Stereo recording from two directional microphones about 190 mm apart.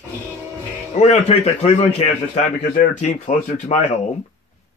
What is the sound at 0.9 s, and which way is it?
Speech, 35° left (ahead or behind).